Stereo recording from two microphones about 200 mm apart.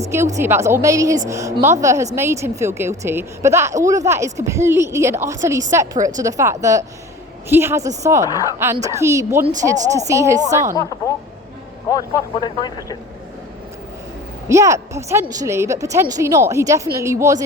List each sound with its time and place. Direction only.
0.0 s a woman's voice: 15° right (ahead or behind)
12.4 s speech: 20° left (ahead or behind)
14.4 s a woman's voice: 15° right (ahead or behind)